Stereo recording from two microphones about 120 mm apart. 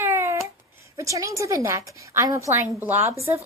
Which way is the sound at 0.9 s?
25° right (ahead or behind).